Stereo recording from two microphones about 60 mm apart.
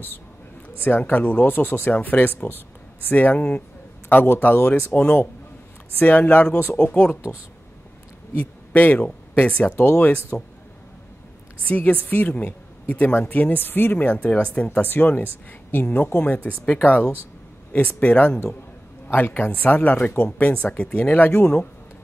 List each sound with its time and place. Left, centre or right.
0.7 s speech: left
5.9 s speech: left
8.4 s speech: left
9.8 s speech: left
11.6 s speech: left
14.8 s speech: left